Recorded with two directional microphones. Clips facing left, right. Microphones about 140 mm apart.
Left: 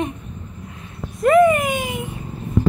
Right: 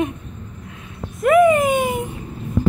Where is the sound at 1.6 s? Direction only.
45° right (ahead or behind).